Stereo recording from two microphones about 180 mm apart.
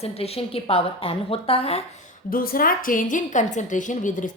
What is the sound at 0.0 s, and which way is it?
A woman's voice, 35° left (ahead or behind).